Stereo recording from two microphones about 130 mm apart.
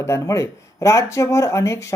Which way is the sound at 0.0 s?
20° left (ahead or behind).